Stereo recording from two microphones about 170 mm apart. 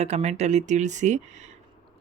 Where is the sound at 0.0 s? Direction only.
40° right (ahead or behind).